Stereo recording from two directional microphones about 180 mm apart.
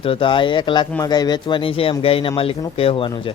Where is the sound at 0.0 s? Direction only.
30° left (ahead or behind).